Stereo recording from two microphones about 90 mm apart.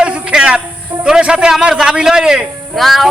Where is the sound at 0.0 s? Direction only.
15° right (ahead or behind).